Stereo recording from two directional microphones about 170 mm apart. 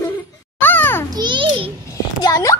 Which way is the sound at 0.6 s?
10° left (ahead or behind).